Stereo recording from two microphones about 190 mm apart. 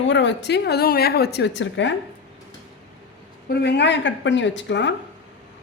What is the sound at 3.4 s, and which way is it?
A woman's voice, 60° left (ahead or behind).